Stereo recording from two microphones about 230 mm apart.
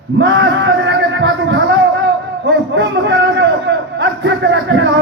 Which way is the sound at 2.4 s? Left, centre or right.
Right.